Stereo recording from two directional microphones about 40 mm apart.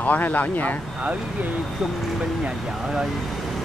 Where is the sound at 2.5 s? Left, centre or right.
Right.